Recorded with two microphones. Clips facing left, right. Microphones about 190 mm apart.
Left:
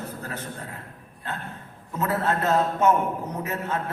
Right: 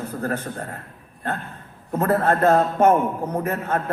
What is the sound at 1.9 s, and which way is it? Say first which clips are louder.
A man's voice: right 6 dB; 55° right (ahead or behind).